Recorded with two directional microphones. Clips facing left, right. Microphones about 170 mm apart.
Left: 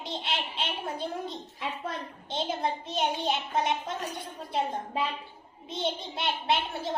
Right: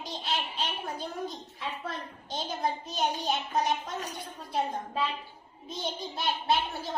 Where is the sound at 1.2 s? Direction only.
20° left (ahead or behind).